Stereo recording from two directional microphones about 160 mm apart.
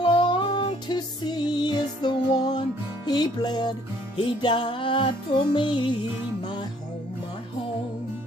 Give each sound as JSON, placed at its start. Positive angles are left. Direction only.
{"t": 0.0, "sound": "music", "side_deg": 30}